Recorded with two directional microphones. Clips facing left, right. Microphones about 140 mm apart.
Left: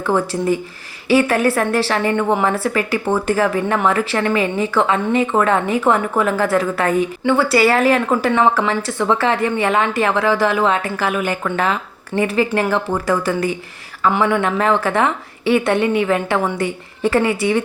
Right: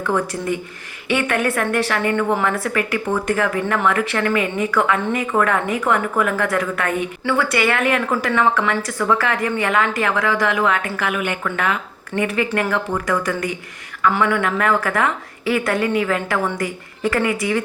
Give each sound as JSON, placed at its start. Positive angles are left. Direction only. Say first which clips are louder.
{"t": 0.0, "sound": "a woman's voice", "louder": "left 3 dB", "side_deg": 30}